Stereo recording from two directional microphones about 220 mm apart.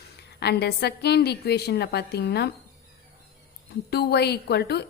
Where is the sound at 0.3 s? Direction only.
45° left (ahead or behind).